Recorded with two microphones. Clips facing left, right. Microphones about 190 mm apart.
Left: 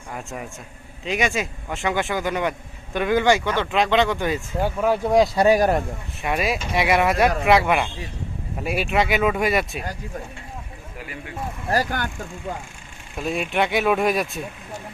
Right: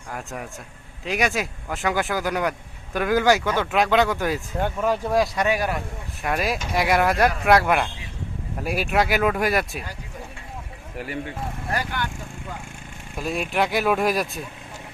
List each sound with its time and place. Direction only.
0.1 s speech: centre (ahead or behind); by 5.8 s 40° left (ahead or behind)
6.2 s speech: centre (ahead or behind)
11.7 s speech: 40° left (ahead or behind)
13.1 s speech: centre (ahead or behind)